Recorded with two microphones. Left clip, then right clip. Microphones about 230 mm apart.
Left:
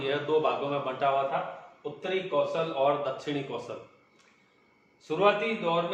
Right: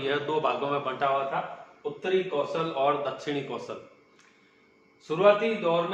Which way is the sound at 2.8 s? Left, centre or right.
Centre.